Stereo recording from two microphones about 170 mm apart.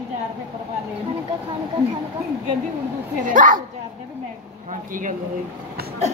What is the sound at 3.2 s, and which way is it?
Speech, 50° right (ahead or behind).